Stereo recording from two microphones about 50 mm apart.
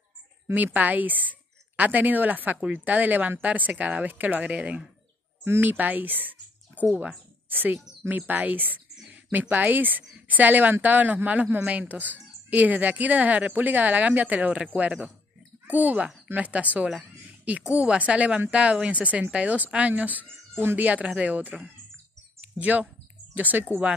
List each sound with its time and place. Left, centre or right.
0.6 s speech: right
5.4 s speech: right
20.2 s bird: right
20.7 s speech: right
22.6 s speech: right